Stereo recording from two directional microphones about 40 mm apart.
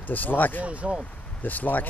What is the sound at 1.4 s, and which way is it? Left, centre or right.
Speech, left.